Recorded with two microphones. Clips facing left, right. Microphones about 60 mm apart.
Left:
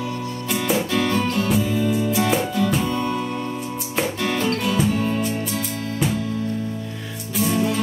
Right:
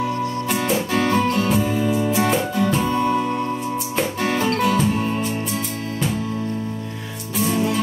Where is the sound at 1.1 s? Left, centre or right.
Right.